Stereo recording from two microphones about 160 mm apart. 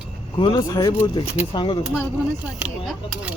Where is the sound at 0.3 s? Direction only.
30° left (ahead or behind).